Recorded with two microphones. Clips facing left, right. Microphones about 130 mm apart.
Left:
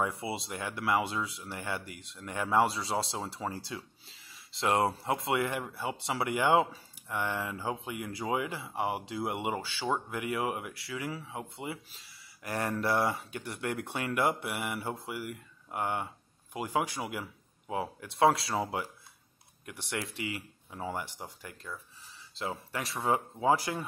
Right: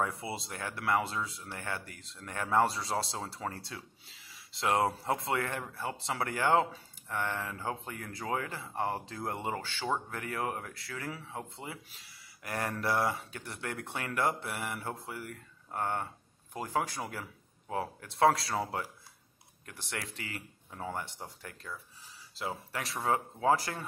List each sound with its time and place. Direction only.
0.0 s speech: centre (ahead or behind)
3.4 s speech: 15° left (ahead or behind)
4.3 s speech: centre (ahead or behind)
5.4 s speech: 15° left (ahead or behind)
12.4 s speech: 30° left (ahead or behind)
12.8 s speech: centre (ahead or behind)
17.0 s a sound: 15° left (ahead or behind)
17.7 s speech: centre (ahead or behind)
18.6 s speech: 15° left (ahead or behind); by 23.1 s centre (ahead or behind)